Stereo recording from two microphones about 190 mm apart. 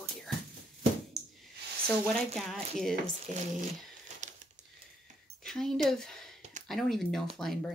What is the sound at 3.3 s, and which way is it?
Speech, 40° right (ahead or behind).